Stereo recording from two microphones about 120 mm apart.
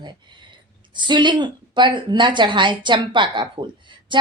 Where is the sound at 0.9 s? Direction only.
40° right (ahead or behind).